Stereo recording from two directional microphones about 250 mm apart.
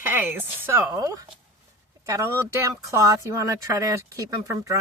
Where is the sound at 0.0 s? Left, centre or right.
Centre.